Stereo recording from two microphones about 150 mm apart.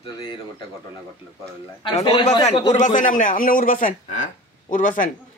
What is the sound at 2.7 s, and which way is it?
A man's voice, 55° left (ahead or behind).